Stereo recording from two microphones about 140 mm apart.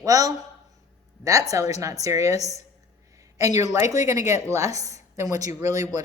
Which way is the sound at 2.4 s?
50° left (ahead or behind).